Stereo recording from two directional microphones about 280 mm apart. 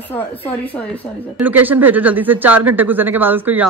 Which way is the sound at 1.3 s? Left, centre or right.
Centre.